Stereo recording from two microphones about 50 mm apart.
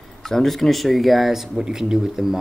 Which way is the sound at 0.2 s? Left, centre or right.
Centre.